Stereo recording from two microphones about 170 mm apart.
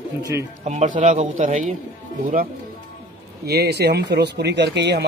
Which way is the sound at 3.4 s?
70° right (ahead or behind).